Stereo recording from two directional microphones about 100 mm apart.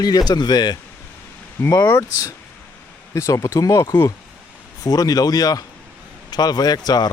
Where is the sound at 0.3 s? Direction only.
45° left (ahead or behind).